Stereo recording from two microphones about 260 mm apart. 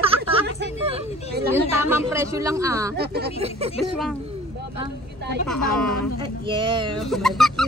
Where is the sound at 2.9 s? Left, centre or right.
Right.